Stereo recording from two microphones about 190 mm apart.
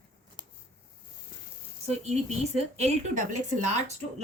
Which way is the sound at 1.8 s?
35° right (ahead or behind).